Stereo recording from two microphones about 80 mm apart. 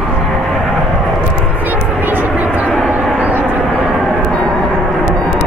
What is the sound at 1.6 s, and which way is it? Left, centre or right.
Vehicle, right.